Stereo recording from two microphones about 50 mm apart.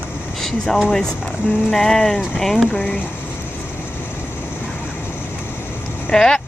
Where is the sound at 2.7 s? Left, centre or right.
Left.